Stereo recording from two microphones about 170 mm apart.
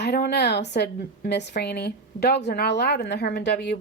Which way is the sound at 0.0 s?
70° left (ahead or behind).